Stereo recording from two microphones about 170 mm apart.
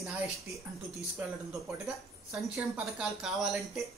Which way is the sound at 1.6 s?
Centre (ahead or behind).